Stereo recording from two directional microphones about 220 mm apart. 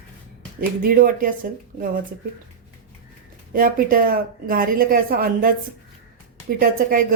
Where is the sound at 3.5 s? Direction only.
40° right (ahead or behind).